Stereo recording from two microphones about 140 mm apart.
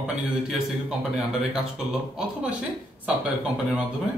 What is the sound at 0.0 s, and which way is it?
Speech, 5° right (ahead or behind).